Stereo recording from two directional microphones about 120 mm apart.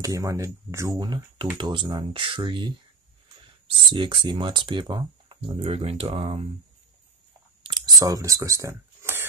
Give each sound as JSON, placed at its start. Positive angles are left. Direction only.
{"t": 0.0, "sound": "speech", "side_deg": -30}
{"t": 3.9, "sound": "speech", "side_deg": -45}
{"t": 7.6, "sound": "a sound", "side_deg": -35}